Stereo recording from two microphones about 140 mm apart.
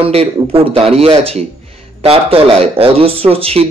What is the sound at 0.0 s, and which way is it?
A man's voice, 45° right (ahead or behind).